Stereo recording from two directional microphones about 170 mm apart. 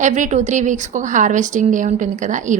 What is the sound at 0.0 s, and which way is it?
A woman's voice, 45° right (ahead or behind).